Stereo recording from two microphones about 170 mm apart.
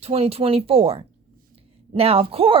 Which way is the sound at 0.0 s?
35° right (ahead or behind).